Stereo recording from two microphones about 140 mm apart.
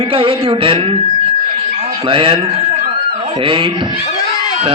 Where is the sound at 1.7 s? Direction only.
45° right (ahead or behind).